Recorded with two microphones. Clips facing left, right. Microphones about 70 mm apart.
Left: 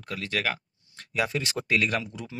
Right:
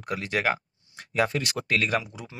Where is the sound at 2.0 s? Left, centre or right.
Centre.